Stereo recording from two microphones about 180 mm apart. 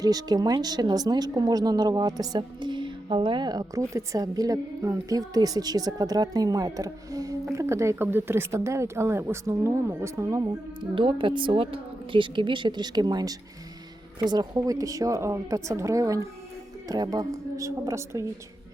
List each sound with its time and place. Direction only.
0.0 s speech: 20° right (ahead or behind)